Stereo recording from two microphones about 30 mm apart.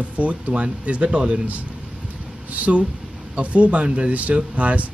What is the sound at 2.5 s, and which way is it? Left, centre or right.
Speech, right.